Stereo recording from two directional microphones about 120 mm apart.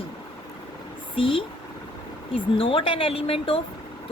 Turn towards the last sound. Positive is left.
turn(degrees=50)  # may be behind; listen again after turning